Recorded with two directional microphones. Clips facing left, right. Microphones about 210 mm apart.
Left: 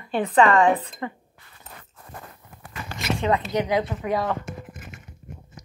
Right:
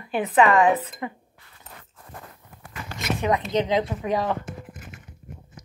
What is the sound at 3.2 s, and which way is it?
A woman's voice, 20° right (ahead or behind).